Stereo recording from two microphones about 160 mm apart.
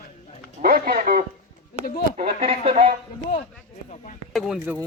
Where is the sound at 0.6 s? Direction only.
65° right (ahead or behind).